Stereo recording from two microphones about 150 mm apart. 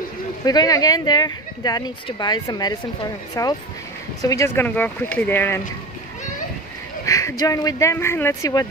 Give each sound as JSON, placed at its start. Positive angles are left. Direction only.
{"t": 0.5, "sound": "speech", "side_deg": 25}
{"t": 7.1, "sound": "speech", "side_deg": 20}